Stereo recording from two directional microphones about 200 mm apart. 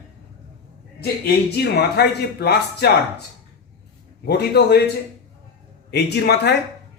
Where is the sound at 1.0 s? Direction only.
55° left (ahead or behind).